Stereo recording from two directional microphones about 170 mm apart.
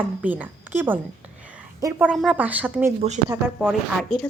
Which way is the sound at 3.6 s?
5° right (ahead or behind).